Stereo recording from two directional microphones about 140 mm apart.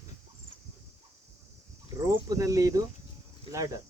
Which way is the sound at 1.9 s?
25° right (ahead or behind).